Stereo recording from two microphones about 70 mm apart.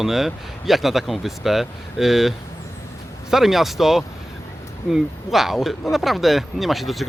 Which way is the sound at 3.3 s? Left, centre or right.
Centre.